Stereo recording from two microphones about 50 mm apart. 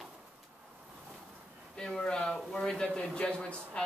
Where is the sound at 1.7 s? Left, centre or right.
Centre.